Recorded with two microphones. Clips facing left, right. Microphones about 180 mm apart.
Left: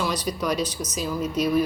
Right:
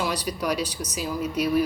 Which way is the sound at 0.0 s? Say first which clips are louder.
Left 1 dB; 10° right (ahead or behind).